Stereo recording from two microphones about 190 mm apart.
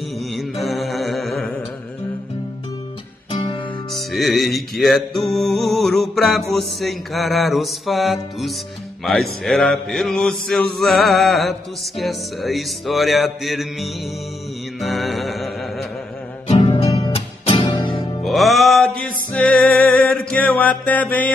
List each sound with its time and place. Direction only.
0.3 s mantra: centre (ahead or behind)
3.3 s music: 30° left (ahead or behind)
3.9 s music: centre (ahead or behind)
5.3 s mantra: centre (ahead or behind)
14.8 s music: centre (ahead or behind)
16.4 s music: 30° left (ahead or behind)
18.2 s music: centre (ahead or behind)
20.2 s mantra: 5° left (ahead or behind)